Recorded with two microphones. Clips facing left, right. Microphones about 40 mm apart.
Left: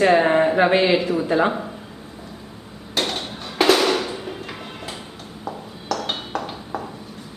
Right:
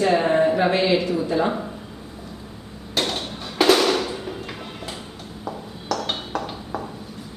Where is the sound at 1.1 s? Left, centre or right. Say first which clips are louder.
Left 3 dB; left.